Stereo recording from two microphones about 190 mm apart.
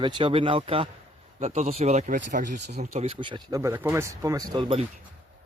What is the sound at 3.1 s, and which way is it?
Speech, 25° right (ahead or behind).